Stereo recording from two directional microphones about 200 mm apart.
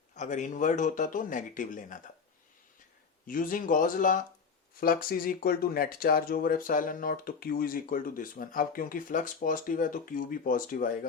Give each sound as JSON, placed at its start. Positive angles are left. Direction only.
{"t": 0.2, "sound": "speech", "side_deg": 40}
{"t": 3.2, "sound": "speech", "side_deg": 45}